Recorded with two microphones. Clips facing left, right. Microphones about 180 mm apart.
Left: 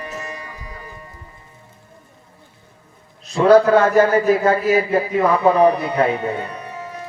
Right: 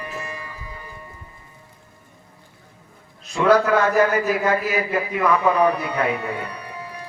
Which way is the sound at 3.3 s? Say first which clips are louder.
Left 5 dB; 35° left (ahead or behind).